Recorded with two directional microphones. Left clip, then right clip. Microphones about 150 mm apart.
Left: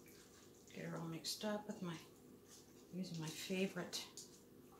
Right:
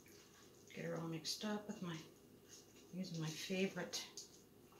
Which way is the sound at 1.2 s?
25° left (ahead or behind).